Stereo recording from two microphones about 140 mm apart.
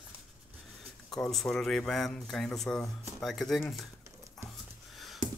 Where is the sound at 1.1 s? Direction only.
5° left (ahead or behind).